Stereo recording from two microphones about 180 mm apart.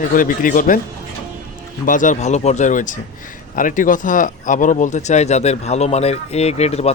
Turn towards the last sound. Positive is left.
turn(degrees=35)  # may be behind; listen again after turning